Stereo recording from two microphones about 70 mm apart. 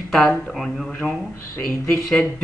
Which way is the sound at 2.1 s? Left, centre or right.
Centre.